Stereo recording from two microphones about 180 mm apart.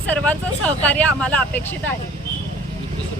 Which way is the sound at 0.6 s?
5° left (ahead or behind).